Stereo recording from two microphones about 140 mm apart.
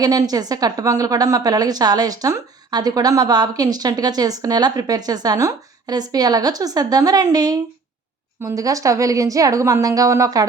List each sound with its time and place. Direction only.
0.0 s a woman's voice: 25° right (ahead or behind)